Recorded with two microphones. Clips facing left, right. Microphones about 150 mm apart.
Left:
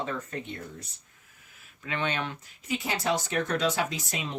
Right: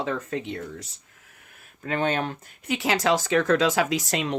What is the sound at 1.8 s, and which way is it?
Speech, 45° right (ahead or behind).